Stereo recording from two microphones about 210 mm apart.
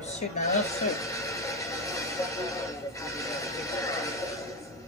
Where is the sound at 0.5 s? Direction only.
15° left (ahead or behind).